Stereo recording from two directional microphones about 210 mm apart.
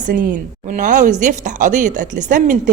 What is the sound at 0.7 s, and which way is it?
Speech, 35° right (ahead or behind).